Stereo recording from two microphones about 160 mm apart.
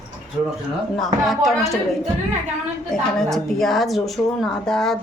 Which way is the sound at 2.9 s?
5° left (ahead or behind).